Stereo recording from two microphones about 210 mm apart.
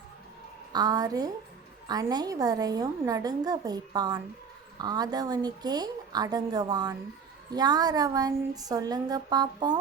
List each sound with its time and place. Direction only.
0.7 s a woman's voice: 20° right (ahead or behind)